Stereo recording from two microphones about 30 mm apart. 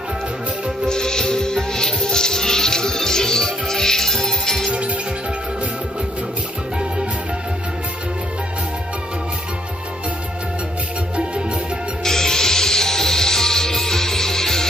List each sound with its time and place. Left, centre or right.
0.8 s music: left
12.0 s music: centre